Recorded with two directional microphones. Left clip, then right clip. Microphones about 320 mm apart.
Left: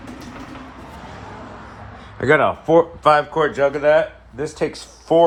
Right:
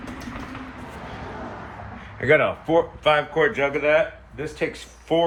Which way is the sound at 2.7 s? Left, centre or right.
Centre.